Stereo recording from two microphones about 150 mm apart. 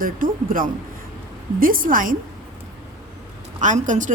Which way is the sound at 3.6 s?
55° right (ahead or behind).